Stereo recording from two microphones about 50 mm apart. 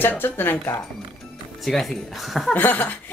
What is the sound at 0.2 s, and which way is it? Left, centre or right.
Speech, left.